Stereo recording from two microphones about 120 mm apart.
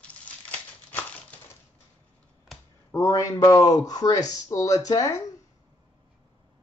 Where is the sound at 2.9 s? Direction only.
25° left (ahead or behind).